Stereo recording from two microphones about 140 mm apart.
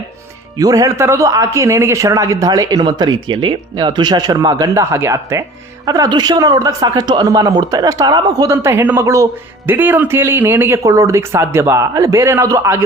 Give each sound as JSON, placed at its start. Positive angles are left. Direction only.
{"t": 0.6, "sound": "a man's voice", "side_deg": -25}